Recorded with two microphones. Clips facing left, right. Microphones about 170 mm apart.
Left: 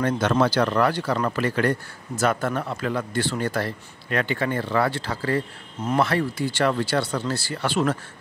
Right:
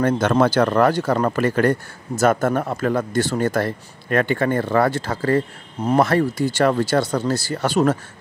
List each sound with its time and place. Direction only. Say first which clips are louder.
0.0 s speech: right 4 dB; 50° right (ahead or behind)